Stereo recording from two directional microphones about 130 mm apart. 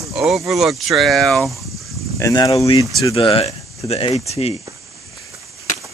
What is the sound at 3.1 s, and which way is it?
Speech, 45° left (ahead or behind).